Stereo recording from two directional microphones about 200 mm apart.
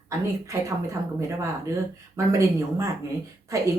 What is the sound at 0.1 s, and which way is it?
Speech, 15° right (ahead or behind).